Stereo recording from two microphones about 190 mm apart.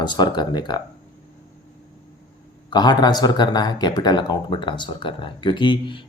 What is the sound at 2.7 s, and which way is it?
Speech, 20° left (ahead or behind).